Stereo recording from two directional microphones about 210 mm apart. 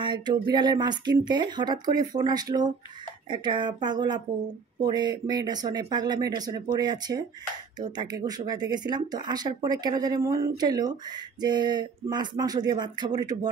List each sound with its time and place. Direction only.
0.0 s speech: 20° right (ahead or behind)